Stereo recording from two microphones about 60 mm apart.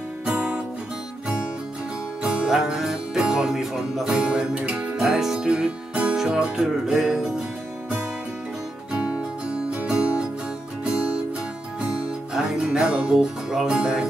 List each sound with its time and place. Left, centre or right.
0.2 s music: centre
2.2 s music: centre
5.0 s speech: centre
8.9 s music: centre